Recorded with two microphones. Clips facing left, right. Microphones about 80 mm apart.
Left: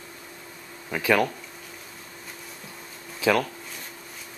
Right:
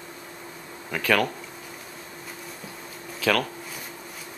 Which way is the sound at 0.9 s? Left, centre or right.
Centre.